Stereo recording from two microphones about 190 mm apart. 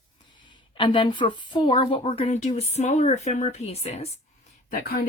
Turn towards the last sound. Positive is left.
turn(degrees=50)  # may be behind; listen again after turning